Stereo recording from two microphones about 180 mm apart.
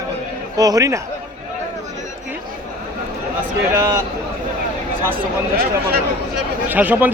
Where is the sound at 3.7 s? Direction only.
15° right (ahead or behind).